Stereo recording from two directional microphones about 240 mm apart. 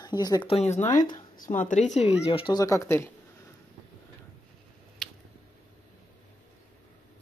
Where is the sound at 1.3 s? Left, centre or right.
Left; by 3.1 s centre.